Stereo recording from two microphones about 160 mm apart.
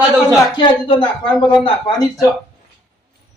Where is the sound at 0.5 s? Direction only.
30° left (ahead or behind).